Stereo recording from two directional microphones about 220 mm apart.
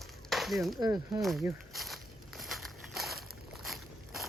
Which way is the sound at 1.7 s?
Centre (ahead or behind).